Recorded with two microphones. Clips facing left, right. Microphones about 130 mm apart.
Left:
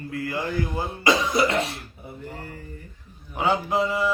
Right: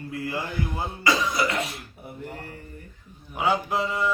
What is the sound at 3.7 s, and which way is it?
Mantra, centre (ahead or behind).